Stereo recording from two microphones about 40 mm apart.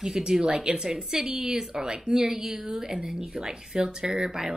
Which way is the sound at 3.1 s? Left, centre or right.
Right.